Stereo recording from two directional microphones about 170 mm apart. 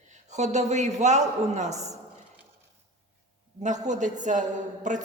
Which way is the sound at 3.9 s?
45° right (ahead or behind).